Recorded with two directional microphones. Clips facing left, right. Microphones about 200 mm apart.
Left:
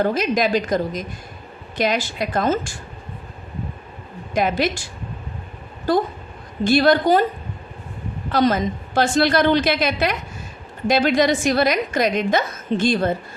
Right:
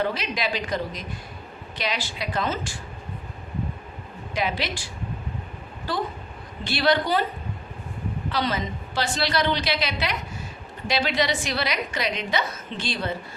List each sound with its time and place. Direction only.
0.0 s a woman's voice: 45° left (ahead or behind)
4.4 s a woman's voice: 45° left (ahead or behind)
5.9 s a woman's voice: 45° left (ahead or behind)
8.3 s a woman's voice: 45° left (ahead or behind)